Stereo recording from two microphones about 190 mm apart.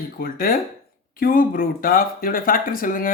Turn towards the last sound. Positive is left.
turn(degrees=45)  # may be behind; listen again after turning